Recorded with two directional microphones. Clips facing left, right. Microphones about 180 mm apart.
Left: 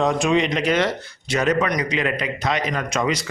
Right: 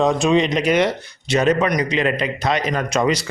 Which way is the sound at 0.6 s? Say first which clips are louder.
Right 3 dB; 15° right (ahead or behind).